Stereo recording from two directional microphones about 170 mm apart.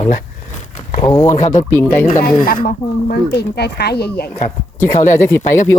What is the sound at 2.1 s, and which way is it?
Speech, 55° left (ahead or behind).